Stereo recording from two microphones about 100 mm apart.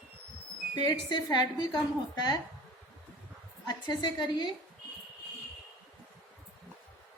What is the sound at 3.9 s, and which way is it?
Speech, 45° left (ahead or behind).